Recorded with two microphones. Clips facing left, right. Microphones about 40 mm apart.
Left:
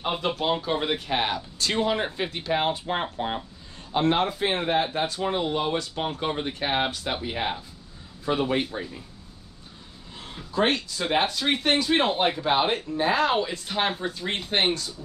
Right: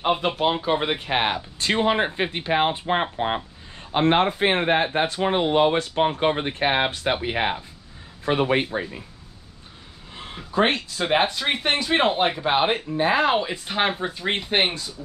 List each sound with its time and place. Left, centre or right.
0.0 s speech: right
10.1 s speech: right